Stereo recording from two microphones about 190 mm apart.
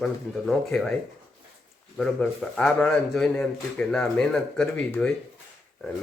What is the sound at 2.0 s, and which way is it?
A man's voice, 5° left (ahead or behind).